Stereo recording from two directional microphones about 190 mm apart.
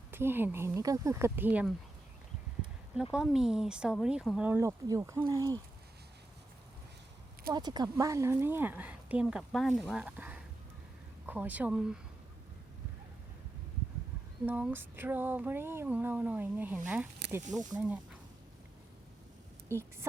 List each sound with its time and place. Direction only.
0.1 s speech: 10° right (ahead or behind)
2.9 s speech: 5° right (ahead or behind)
7.5 s speech: 20° right (ahead or behind); by 11.9 s 5° right (ahead or behind)
14.4 s speech: 10° right (ahead or behind)
19.6 s a woman's voice: 15° right (ahead or behind)